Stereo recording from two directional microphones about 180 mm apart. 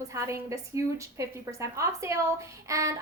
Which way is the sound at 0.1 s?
15° right (ahead or behind).